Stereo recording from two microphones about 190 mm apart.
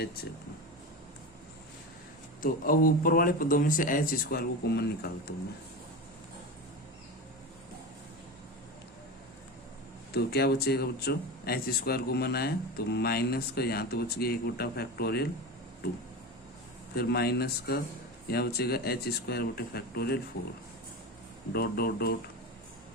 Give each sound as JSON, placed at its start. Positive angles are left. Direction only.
{"t": 2.4, "sound": "speech", "side_deg": 50}
{"t": 10.1, "sound": "speech", "side_deg": 55}
{"t": 16.9, "sound": "speech", "side_deg": 55}
{"t": 21.5, "sound": "speech", "side_deg": 55}